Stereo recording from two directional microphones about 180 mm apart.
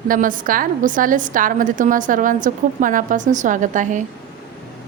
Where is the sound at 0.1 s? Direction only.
50° right (ahead or behind).